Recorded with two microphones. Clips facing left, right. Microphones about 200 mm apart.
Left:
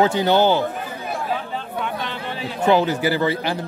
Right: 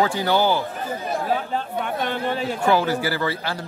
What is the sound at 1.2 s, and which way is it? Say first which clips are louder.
Chatter: right 2 dB; 45° right (ahead or behind).